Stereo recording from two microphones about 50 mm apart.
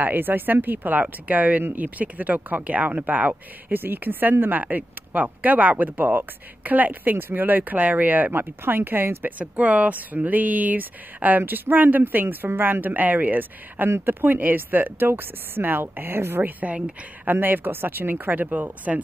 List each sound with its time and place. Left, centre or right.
0.0 s speech: right
8.3 s speech: right
9.4 s speech: right
13.8 s speech: right
14.2 s speech: right
16.4 s speech: right
16.7 s a woman's voice: right
17.3 s speech: right